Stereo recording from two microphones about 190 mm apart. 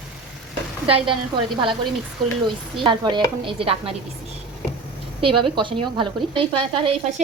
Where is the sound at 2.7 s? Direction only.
25° right (ahead or behind).